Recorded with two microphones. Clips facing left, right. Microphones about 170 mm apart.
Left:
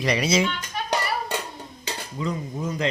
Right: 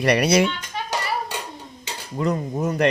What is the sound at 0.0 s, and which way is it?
Speech, 65° right (ahead or behind).